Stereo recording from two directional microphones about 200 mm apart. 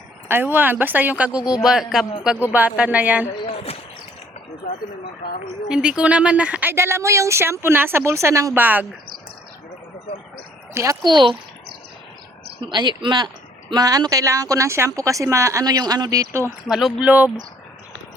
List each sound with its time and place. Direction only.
0.3 s speech: 10° right (ahead or behind)
1.4 s speech: 20° left (ahead or behind)
1.6 s speech: 5° right (ahead or behind)
3.4 s speech: 30° left (ahead or behind)
5.6 s speech: 5° right (ahead or behind)
10.8 s speech: 20° right (ahead or behind)
12.6 s speech: 20° right (ahead or behind)
16.6 s speech: 5° right (ahead or behind)